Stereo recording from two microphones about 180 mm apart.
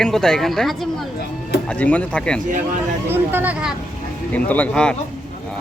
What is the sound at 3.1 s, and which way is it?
Speech, 10° right (ahead or behind).